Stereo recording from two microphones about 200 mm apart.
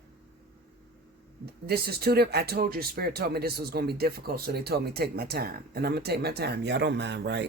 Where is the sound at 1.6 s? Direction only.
50° right (ahead or behind).